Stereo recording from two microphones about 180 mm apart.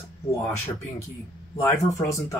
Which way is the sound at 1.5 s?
15° left (ahead or behind).